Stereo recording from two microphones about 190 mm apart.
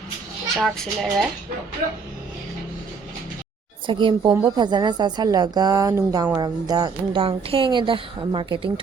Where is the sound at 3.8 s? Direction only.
25° right (ahead or behind).